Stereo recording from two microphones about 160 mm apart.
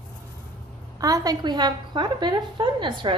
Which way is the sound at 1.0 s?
25° right (ahead or behind).